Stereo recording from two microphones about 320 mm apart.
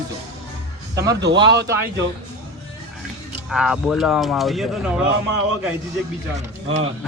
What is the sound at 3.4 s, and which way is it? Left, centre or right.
Speech, centre.